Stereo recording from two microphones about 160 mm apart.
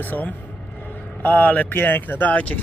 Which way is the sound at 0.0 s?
10° left (ahead or behind).